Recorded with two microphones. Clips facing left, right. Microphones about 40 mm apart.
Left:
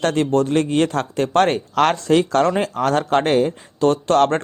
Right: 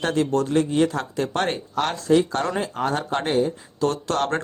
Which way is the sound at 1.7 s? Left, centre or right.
Left.